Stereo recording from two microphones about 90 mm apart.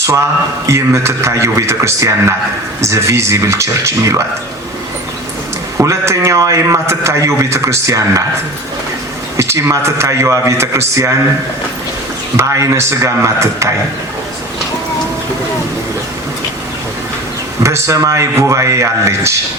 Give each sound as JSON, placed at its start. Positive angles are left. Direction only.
{"t": 0.7, "sound": "a man's voice", "side_deg": -30}
{"t": 5.7, "sound": "a man's voice", "side_deg": -35}
{"t": 9.4, "sound": "a man's voice", "side_deg": -35}
{"t": 12.4, "sound": "a man's voice", "side_deg": -30}
{"t": 17.6, "sound": "a man's voice", "side_deg": -35}